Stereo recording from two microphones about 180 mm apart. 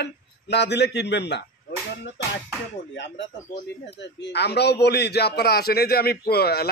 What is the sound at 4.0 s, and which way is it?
A man's voice, 75° left (ahead or behind).